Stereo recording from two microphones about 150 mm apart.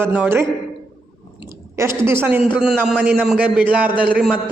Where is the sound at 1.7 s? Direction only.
15° right (ahead or behind).